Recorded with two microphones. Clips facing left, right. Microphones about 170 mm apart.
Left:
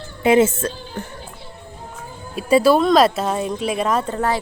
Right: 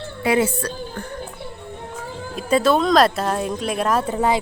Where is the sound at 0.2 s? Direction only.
25° left (ahead or behind).